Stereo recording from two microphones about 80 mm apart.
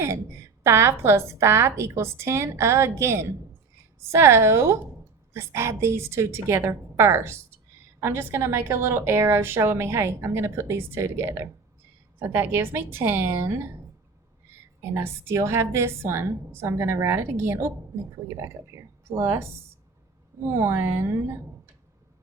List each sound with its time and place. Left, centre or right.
0.0 s a woman's voice: right
20.6 s a woman's voice: right